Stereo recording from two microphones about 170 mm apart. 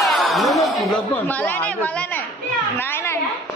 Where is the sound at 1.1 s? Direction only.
10° left (ahead or behind).